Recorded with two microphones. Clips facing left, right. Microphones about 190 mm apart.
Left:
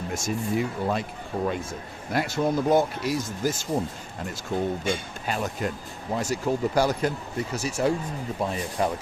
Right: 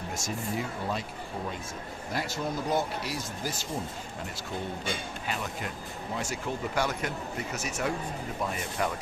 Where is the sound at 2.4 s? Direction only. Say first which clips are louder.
Left 10 dB; 90° left.